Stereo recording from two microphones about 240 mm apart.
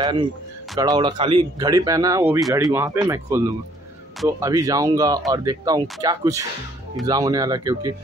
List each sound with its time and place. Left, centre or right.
0.7 s speech: centre